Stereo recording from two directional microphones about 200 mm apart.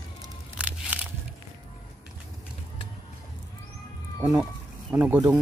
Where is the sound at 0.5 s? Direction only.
5° right (ahead or behind).